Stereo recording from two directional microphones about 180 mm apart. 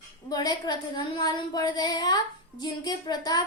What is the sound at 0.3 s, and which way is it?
A woman's voice, 20° left (ahead or behind).